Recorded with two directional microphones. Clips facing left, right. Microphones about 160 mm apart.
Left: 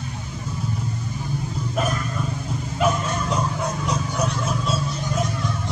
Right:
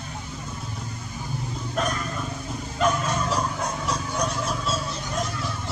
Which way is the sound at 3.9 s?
Centre (ahead or behind).